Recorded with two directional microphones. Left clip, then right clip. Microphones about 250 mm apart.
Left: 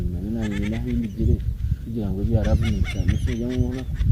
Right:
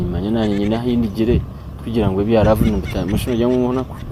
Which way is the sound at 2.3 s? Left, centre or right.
Centre.